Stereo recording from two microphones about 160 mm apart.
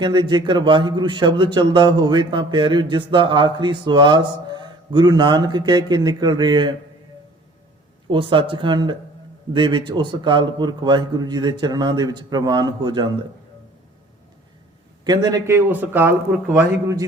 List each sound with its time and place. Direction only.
0.0 s a man's voice: 30° right (ahead or behind)
8.0 s a man's voice: 30° right (ahead or behind)
15.0 s a man's voice: 25° right (ahead or behind)
15.5 s a man's voice: 10° right (ahead or behind)